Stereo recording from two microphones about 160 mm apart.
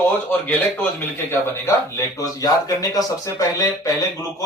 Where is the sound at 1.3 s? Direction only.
15° left (ahead or behind).